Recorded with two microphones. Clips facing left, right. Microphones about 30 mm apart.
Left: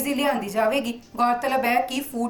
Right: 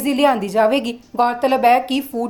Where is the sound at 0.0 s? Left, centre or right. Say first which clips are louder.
Right 7 dB; right.